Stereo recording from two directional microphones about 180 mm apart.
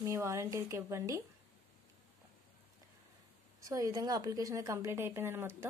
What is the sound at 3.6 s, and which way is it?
A woman's voice, 20° right (ahead or behind).